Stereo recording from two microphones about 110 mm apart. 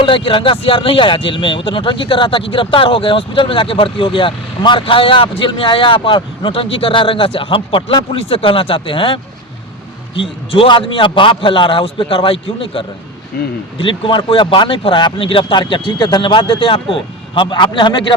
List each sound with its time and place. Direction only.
0.0 s speech: 50° left (ahead or behind)